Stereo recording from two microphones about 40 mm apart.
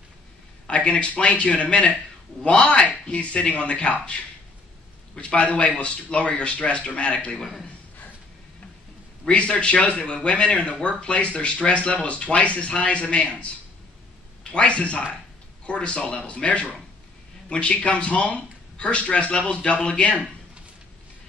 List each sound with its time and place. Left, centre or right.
0.7 s a sound: left
1.1 s speech: left
5.1 s speech: left
9.3 s a man's voice: left